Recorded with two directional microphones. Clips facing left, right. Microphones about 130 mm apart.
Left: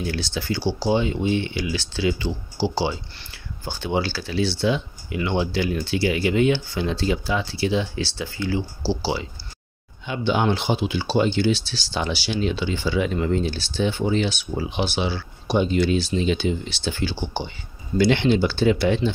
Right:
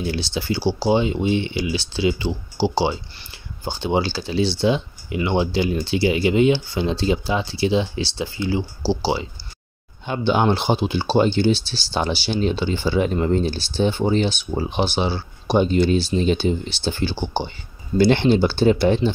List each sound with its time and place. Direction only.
0.0 s speech: 20° right (ahead or behind)
10.0 s speech: 40° right (ahead or behind)